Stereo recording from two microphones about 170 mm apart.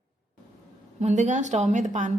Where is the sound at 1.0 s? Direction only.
45° right (ahead or behind).